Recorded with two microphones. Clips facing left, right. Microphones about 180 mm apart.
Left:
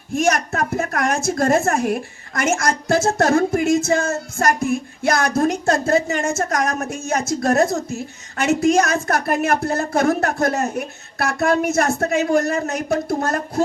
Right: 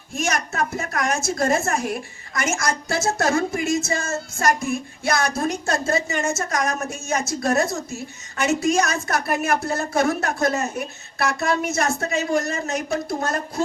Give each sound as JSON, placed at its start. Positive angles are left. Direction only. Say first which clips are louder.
{"t": 0.2, "sound": "speech", "louder": "left 5 dB", "side_deg": 55}